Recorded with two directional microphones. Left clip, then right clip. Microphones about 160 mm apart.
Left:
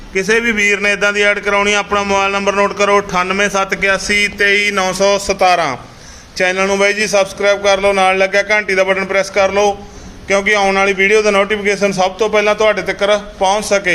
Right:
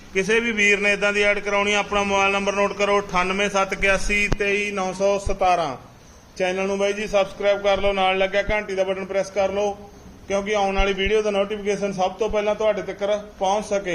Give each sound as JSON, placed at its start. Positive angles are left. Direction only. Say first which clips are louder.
{"t": 0.1, "sound": "a man's voice", "louder": "left 7 dB", "side_deg": 0}